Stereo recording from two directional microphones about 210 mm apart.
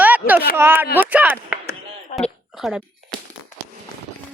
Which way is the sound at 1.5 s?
10° right (ahead or behind).